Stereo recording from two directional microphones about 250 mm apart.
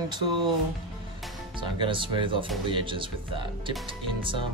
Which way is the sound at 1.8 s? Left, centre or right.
Centre.